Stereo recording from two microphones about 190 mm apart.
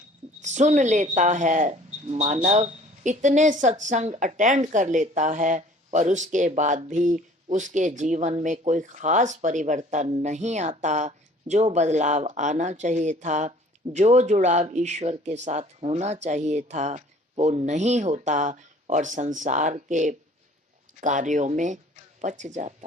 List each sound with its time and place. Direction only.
0.4 s speech: 40° right (ahead or behind)